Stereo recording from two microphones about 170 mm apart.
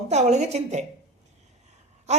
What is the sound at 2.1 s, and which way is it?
Gasp, 40° right (ahead or behind).